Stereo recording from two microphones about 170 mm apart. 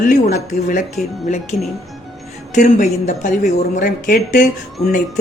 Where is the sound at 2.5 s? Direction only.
45° left (ahead or behind).